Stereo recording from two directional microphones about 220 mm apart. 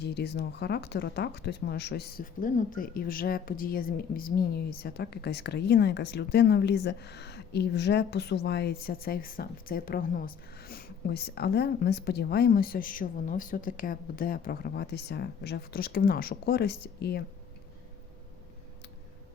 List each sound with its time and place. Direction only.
0.0 s speech: 50° left (ahead or behind)